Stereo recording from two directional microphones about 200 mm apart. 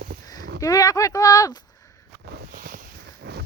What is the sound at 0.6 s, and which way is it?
Speech, 15° left (ahead or behind).